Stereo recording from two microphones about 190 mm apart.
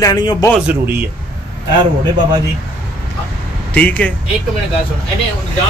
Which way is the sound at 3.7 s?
10° left (ahead or behind).